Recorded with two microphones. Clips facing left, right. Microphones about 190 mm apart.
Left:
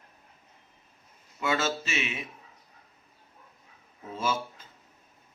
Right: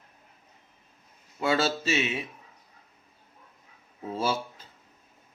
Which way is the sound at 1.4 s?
35° right (ahead or behind).